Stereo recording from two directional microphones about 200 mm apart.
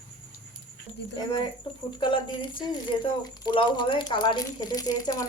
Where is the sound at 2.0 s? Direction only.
25° left (ahead or behind).